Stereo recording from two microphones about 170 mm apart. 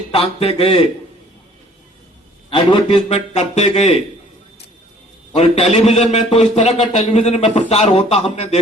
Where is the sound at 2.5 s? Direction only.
30° left (ahead or behind).